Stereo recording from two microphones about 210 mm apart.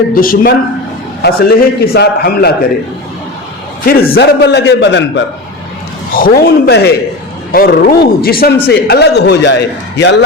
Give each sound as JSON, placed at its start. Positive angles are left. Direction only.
{"t": 0.1, "sound": "speech", "side_deg": 45}
{"t": 3.8, "sound": "speech", "side_deg": 45}
{"t": 6.1, "sound": "speech", "side_deg": 45}